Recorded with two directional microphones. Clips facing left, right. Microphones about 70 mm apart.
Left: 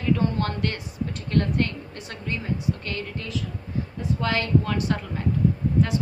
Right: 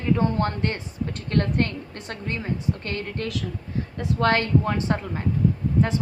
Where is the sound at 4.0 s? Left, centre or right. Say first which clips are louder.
Right 6 dB; right.